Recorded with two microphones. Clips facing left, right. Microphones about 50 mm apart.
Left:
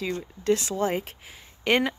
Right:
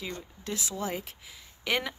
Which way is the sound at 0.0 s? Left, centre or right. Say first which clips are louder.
Left 10 dB; left.